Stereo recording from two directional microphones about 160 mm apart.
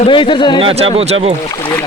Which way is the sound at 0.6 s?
40° right (ahead or behind).